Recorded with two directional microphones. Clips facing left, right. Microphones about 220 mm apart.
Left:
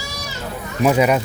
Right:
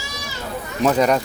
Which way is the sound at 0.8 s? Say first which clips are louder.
Left 1 dB; 10° left (ahead or behind).